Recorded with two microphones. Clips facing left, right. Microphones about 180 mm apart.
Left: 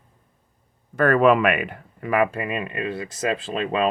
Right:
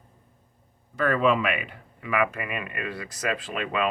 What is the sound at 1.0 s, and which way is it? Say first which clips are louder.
Speech: left 6 dB; 55° left (ahead or behind).